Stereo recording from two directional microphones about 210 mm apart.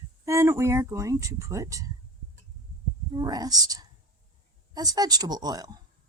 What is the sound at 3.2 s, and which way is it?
Speech, 20° right (ahead or behind).